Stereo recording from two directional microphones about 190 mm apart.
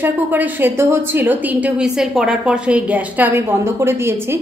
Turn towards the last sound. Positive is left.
turn(degrees=-10)  # may be behind; listen again after turning